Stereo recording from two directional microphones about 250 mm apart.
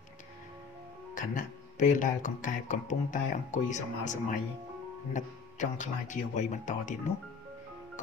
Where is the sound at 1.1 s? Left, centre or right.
Left.